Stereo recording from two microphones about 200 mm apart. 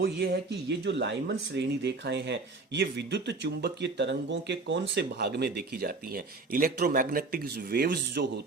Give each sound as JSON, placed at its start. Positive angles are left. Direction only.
{"t": 0.0, "sound": "speech", "side_deg": -55}